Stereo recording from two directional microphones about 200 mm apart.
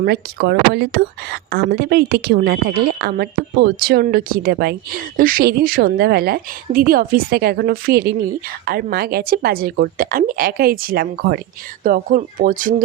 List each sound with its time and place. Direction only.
0.0 s speech: 55° right (ahead or behind)